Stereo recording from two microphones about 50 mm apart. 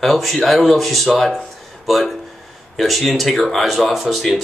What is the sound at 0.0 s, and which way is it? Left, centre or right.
Speech, centre.